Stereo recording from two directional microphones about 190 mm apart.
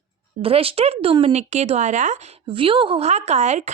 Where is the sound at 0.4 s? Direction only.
30° right (ahead or behind).